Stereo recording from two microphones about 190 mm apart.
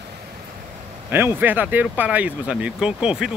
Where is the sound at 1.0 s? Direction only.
10° right (ahead or behind).